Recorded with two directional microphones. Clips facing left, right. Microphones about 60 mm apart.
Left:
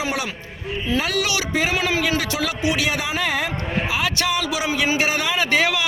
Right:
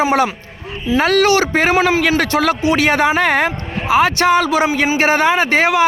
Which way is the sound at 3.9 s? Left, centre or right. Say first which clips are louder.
Right 13 dB; right.